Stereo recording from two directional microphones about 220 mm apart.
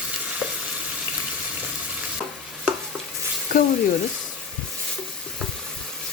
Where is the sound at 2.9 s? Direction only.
5° right (ahead or behind).